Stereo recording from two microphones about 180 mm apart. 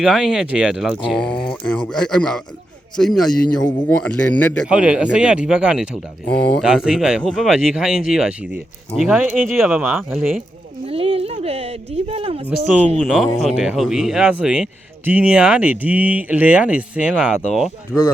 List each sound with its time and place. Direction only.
0.0 s speech: 5° right (ahead or behind)
4.6 s speech: 5° right (ahead or behind)
10.8 s speech: 30° right (ahead or behind)
12.6 s speech: 5° right (ahead or behind)